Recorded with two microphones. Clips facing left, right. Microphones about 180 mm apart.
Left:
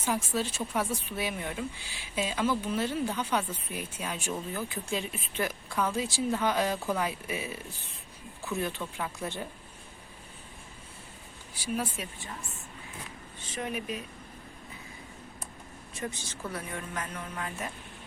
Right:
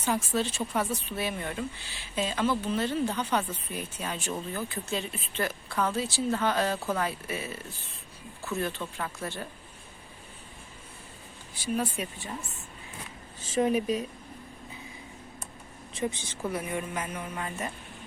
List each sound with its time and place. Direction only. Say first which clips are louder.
0.3 s a woman's voice: right 2 dB; 5° left (ahead or behind)
11.5 s a woman's voice: right 3 dB; 5° left (ahead or behind)
13.6 s speech: right 10 dB; 35° right (ahead or behind)
16.0 s speech: right 5 dB; 20° right (ahead or behind); by 17.7 s 5° right (ahead or behind)